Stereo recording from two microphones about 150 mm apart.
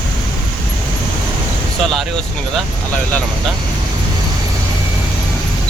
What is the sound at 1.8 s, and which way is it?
Speech, centre (ahead or behind).